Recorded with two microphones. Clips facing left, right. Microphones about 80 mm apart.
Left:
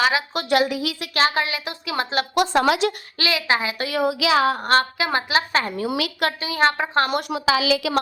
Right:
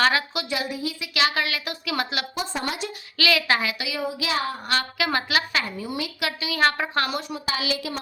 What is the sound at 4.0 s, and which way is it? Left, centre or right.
Speech, left.